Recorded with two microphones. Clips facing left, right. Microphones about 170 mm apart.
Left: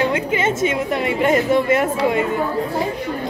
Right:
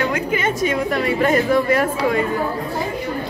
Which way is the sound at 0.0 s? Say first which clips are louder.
Left 2 dB; 25° left (ahead or behind).